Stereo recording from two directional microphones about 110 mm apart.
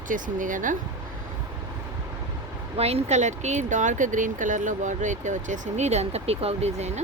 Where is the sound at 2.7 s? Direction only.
70° right (ahead or behind); by 3.7 s 90° right.